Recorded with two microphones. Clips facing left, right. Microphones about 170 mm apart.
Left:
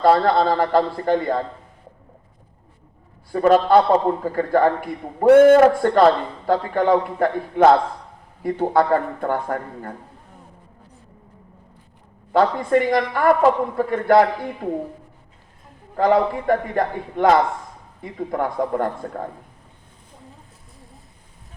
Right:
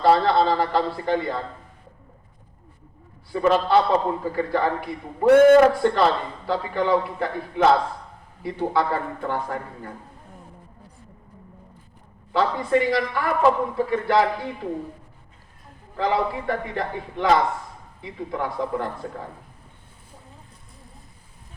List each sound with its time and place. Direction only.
0.0 s a man's voice: 50° left (ahead or behind)
3.3 s a man's voice: 50° left (ahead or behind)
12.3 s a man's voice: 50° left (ahead or behind)
16.0 s a man's voice: 50° left (ahead or behind)